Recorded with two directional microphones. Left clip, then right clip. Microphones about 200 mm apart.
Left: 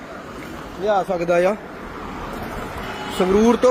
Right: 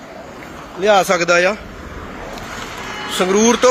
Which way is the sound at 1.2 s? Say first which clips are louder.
Right 4 dB; 5° left (ahead or behind).